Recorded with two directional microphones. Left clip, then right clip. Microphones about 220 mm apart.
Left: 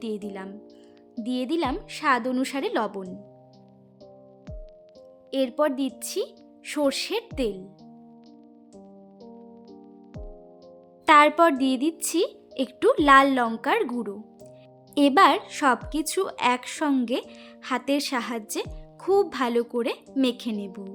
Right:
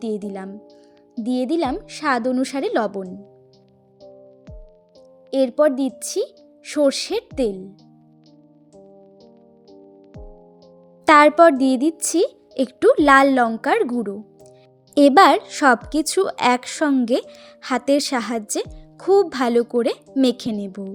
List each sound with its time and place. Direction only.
0.0 s speech: 15° right (ahead or behind)
5.3 s speech: 15° right (ahead or behind)
9.2 s music: centre (ahead or behind)
11.0 s speech: 15° right (ahead or behind)
14.0 s music: 15° right (ahead or behind)
14.9 s speech: 20° right (ahead or behind)